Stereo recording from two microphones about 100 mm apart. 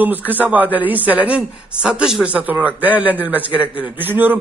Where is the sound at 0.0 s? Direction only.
15° right (ahead or behind).